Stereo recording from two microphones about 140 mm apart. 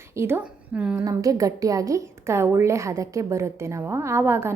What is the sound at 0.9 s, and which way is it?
A woman's voice, 20° right (ahead or behind).